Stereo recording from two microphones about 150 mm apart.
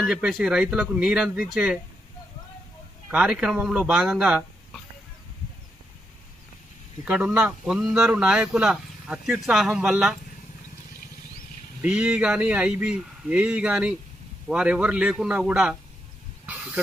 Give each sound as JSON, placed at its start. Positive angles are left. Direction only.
{"t": 0.0, "sound": "a man's voice", "side_deg": 0}
{"t": 3.1, "sound": "speech", "side_deg": -10}
{"t": 7.1, "sound": "a man's voice", "side_deg": -5}
{"t": 11.8, "sound": "speech", "side_deg": -5}